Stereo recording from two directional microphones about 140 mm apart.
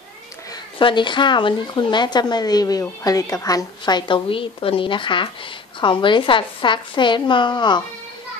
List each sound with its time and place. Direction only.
0.7 s speech: 35° left (ahead or behind)